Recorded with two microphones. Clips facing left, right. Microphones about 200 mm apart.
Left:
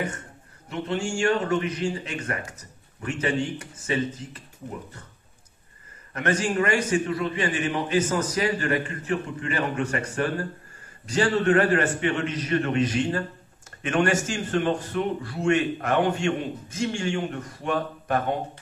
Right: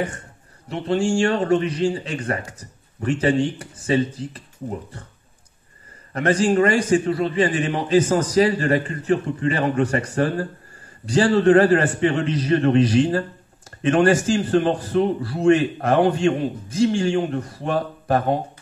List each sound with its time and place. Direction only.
0.7 s a man's voice: 30° right (ahead or behind)
6.1 s a man's voice: 35° right (ahead or behind)